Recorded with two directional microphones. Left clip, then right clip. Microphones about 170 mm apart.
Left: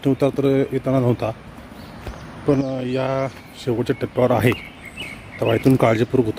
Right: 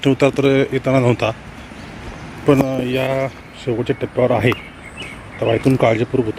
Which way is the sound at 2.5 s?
Centre (ahead or behind).